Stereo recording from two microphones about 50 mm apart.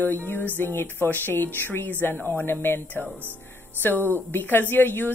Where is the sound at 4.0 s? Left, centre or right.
Right.